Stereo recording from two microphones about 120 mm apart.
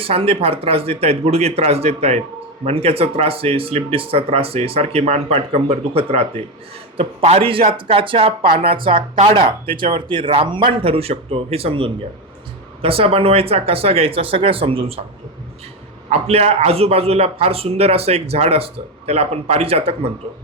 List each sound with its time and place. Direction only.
0.0 s speech: 55° right (ahead or behind)
16.0 s speech: 60° right (ahead or behind)